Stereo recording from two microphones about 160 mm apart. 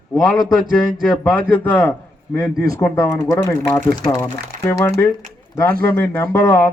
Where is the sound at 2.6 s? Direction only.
20° left (ahead or behind).